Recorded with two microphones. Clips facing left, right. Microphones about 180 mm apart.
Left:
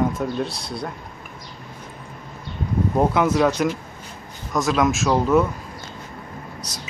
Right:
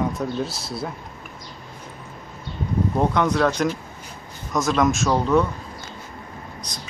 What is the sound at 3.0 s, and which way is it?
Speech, 5° left (ahead or behind).